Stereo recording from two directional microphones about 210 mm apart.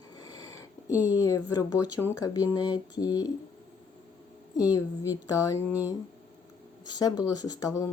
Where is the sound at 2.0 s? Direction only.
15° left (ahead or behind).